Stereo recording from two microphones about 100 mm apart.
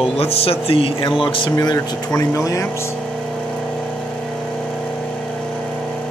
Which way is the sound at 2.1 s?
30° left (ahead or behind).